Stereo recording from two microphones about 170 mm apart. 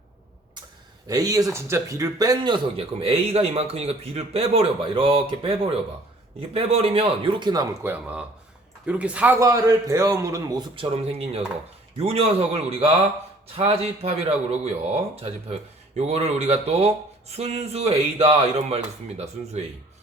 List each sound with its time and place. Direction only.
1.0 s a man's voice: 20° right (ahead or behind)
7.9 s a man's voice: 10° right (ahead or behind)
10.8 s a man's voice: 35° right (ahead or behind)